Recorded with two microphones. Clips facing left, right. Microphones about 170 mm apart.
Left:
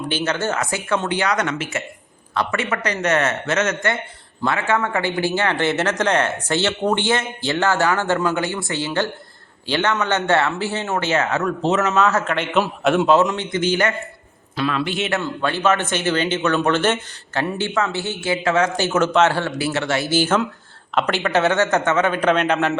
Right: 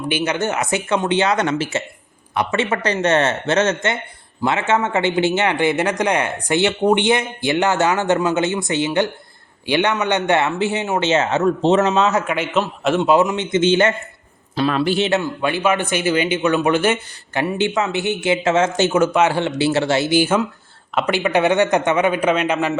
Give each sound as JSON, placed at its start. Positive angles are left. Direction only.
{"t": 0.1, "sound": "a man's voice", "side_deg": -15}
{"t": 2.3, "sound": "a man's voice", "side_deg": -20}
{"t": 12.2, "sound": "speech", "side_deg": -10}
{"t": 12.5, "sound": "a man's voice", "side_deg": 0}
{"t": 13.1, "sound": "a man's voice", "side_deg": -15}
{"t": 15.1, "sound": "a man's voice", "side_deg": -10}
{"t": 18.9, "sound": "a man's voice", "side_deg": -10}
{"t": 20.1, "sound": "speech", "side_deg": -10}